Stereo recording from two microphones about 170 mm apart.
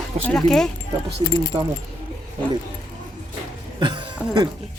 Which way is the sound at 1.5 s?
15° right (ahead or behind).